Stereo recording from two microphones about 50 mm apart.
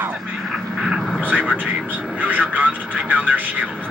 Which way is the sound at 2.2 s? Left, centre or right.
Right.